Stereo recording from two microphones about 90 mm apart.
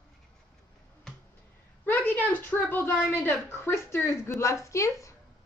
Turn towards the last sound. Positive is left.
turn(degrees=35)  # may be behind; listen again after turning